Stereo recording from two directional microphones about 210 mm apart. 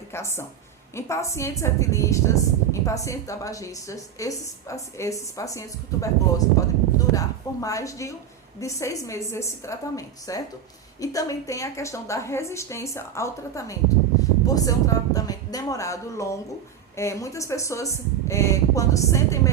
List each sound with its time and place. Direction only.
0.1 s a woman's voice: 10° left (ahead or behind)